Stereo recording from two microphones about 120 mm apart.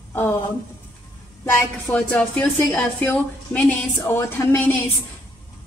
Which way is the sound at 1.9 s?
10° left (ahead or behind).